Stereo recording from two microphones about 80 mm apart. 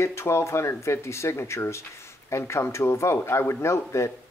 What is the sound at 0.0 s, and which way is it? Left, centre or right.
A man's voice, left.